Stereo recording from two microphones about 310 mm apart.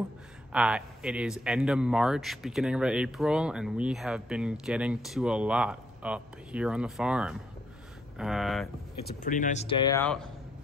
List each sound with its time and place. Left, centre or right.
0.5 s speech: centre
9.0 s speech: left; by 10.3 s centre